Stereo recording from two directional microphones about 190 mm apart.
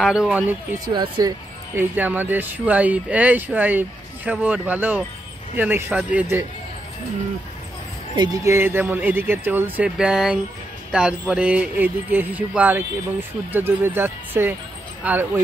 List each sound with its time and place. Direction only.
0.0 s speech: 5° right (ahead or behind)
0.9 s speech: 25° right (ahead or behind)
1.8 s speech: 10° right (ahead or behind)
8.2 s speech: 15° right (ahead or behind)